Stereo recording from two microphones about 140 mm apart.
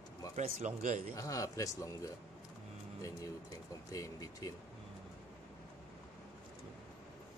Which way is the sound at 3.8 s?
25° left (ahead or behind).